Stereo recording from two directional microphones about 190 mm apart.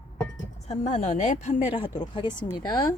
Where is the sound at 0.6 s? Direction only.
35° left (ahead or behind).